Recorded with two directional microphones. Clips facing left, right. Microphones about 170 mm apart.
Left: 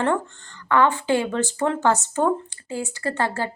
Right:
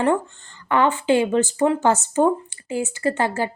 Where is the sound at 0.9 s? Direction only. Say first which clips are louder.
Right 4 dB; 20° right (ahead or behind).